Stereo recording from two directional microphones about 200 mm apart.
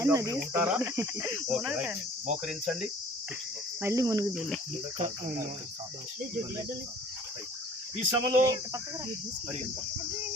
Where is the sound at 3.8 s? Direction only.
15° right (ahead or behind).